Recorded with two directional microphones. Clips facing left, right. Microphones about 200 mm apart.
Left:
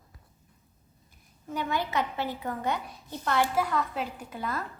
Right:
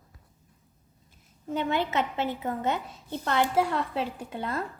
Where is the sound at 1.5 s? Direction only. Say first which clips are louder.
Right 3 dB; 25° right (ahead or behind).